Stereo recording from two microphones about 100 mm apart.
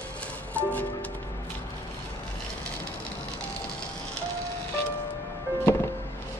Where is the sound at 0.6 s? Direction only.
15° left (ahead or behind).